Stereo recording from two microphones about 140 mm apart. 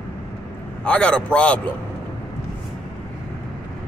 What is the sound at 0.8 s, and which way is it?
Speech, 5° left (ahead or behind).